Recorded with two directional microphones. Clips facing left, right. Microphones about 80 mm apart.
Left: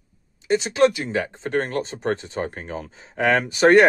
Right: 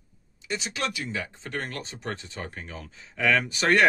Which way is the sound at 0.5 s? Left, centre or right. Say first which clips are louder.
Left 13 dB; left.